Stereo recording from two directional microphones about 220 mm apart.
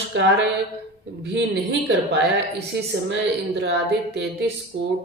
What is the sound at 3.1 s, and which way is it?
Speech, 50° right (ahead or behind).